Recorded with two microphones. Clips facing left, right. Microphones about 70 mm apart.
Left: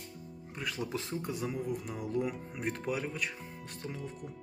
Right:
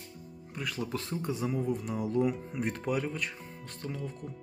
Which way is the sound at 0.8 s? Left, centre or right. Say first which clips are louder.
Right 2 dB; centre.